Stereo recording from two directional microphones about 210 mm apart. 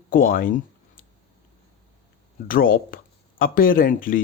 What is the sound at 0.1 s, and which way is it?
Speech, 40° left (ahead or behind).